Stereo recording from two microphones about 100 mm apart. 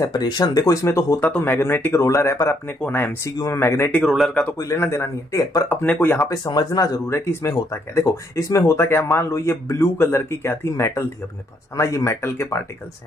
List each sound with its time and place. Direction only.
0.0 s speech: 45° left (ahead or behind)
1.2 s speech: 15° left (ahead or behind)
3.3 s speech: 35° left (ahead or behind)
4.0 s speech: centre (ahead or behind)
4.6 s speech: 30° left (ahead or behind)
5.7 s speech: 20° left (ahead or behind)
6.2 s speech: 40° left (ahead or behind)
7.1 s speech: 25° left (ahead or behind)